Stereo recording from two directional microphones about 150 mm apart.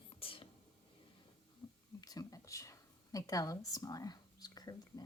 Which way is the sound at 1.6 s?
25° left (ahead or behind).